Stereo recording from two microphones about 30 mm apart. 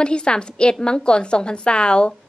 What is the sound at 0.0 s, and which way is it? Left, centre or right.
A woman's voice, left.